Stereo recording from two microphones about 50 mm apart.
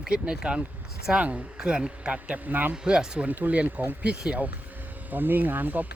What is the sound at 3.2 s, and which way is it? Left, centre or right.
Speech, right.